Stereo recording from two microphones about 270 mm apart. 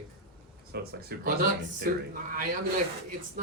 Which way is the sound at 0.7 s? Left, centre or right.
Right.